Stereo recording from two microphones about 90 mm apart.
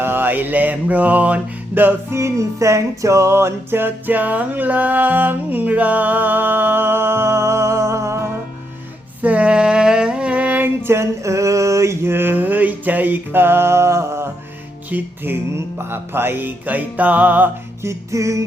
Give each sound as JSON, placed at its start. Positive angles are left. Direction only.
{"t": 0.0, "sound": "mantra", "side_deg": -25}
{"t": 9.2, "sound": "a sound", "side_deg": -15}
{"t": 14.8, "sound": "mantra", "side_deg": -20}
{"t": 17.8, "sound": "music", "side_deg": -35}